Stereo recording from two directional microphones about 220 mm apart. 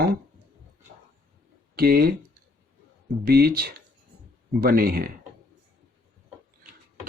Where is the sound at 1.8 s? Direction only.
45° right (ahead or behind).